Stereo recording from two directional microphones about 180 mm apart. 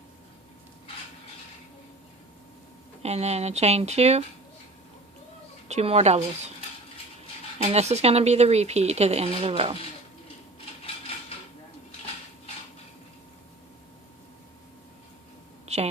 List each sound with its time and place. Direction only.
3.0 s speech: 35° right (ahead or behind)
5.6 s speech: 35° right (ahead or behind)
7.6 s speech: 35° right (ahead or behind)
15.6 s a sound: 35° right (ahead or behind)